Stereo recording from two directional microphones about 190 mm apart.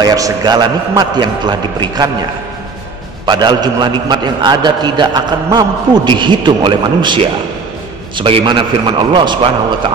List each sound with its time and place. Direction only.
0.0 s a man's voice: 20° right (ahead or behind)
3.3 s a man's voice: 20° right (ahead or behind)